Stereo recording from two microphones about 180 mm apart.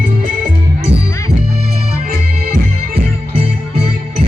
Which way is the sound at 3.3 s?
30° right (ahead or behind).